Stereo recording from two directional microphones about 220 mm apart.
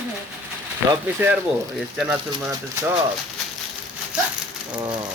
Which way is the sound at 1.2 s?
10° right (ahead or behind).